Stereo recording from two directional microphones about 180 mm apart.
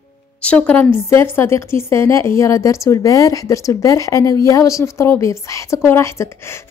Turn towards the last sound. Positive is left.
turn(degrees=15)  # may be behind; listen again after turning